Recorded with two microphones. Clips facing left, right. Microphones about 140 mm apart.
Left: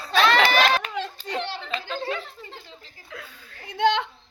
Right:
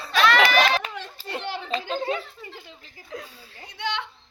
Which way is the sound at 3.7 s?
50° left (ahead or behind).